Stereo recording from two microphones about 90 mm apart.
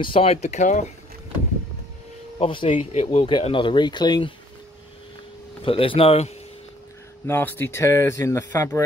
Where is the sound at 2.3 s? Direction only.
75° left (ahead or behind); by 4.3 s 55° left (ahead or behind).